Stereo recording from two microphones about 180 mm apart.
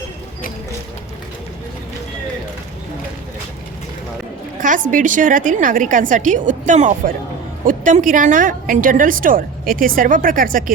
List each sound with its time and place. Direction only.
4.9 s a woman's voice: 45° right (ahead or behind)